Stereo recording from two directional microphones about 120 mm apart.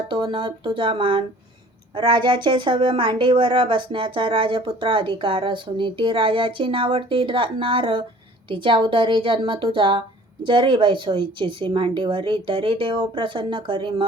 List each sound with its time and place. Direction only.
0.1 s a woman's voice: 45° right (ahead or behind)